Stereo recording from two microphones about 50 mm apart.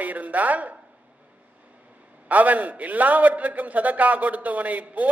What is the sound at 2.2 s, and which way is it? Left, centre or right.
A man's voice, right.